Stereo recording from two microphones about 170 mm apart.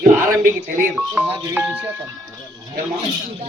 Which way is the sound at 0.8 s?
5° right (ahead or behind).